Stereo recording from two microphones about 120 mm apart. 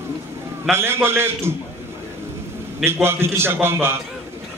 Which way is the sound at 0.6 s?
20° right (ahead or behind).